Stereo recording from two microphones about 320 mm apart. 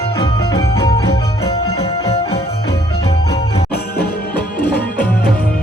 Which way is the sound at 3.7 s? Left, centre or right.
Left.